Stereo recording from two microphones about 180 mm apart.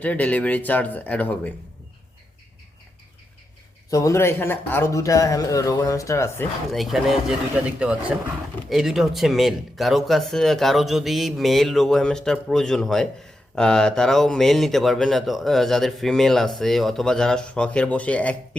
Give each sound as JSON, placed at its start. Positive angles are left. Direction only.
{"t": 0.0, "sound": "a man's voice", "side_deg": 10}
{"t": 3.8, "sound": "a man's voice", "side_deg": 20}
{"t": 6.7, "sound": "speech", "side_deg": 0}